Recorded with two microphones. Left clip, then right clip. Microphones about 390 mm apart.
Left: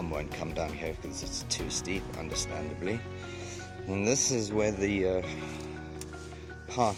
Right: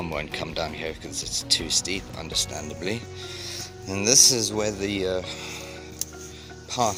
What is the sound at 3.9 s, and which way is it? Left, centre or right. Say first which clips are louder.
Speech: right 10 dB; left.